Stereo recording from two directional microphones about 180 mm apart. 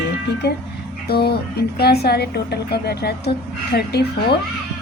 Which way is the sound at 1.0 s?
60° left (ahead or behind).